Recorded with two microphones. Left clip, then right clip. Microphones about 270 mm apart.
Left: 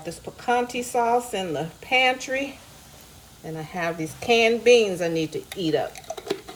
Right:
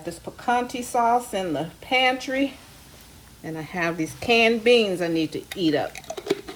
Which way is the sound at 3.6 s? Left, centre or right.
Right.